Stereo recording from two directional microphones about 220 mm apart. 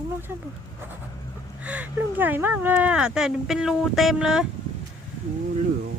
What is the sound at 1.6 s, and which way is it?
Speech, 5° right (ahead or behind).